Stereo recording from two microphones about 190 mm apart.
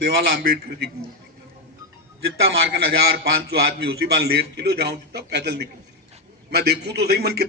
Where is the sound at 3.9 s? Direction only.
55° right (ahead or behind).